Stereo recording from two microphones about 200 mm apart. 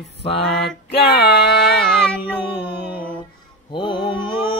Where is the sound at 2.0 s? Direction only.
5° left (ahead or behind).